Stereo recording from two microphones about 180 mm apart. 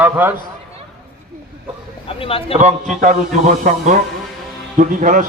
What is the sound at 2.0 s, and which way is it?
Speech, 30° left (ahead or behind).